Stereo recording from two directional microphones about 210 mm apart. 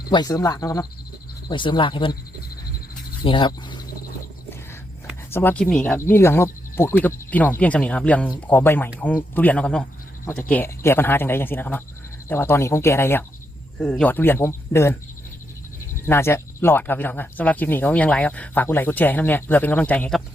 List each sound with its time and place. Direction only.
0.1 s speech: 20° left (ahead or behind)
3.2 s speech: 25° left (ahead or behind)
5.3 s speech: 10° left (ahead or behind)
16.0 s speech: 10° left (ahead or behind)